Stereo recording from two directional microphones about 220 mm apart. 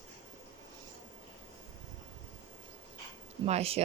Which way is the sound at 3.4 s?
30° right (ahead or behind).